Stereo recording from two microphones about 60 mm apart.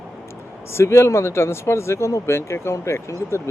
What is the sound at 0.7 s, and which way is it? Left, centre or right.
Speech, left.